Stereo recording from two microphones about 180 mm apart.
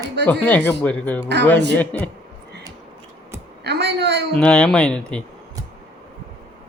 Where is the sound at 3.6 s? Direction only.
70° right (ahead or behind).